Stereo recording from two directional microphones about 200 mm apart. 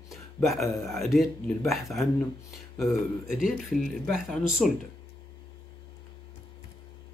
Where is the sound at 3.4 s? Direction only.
Centre (ahead or behind).